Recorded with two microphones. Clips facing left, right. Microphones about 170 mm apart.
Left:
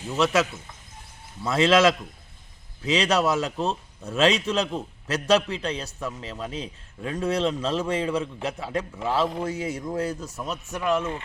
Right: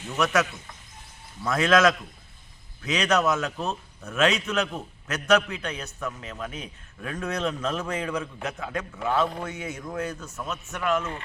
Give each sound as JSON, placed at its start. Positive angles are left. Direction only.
{"t": 0.2, "sound": "a man's voice", "side_deg": 30}
{"t": 1.5, "sound": "a man's voice", "side_deg": 25}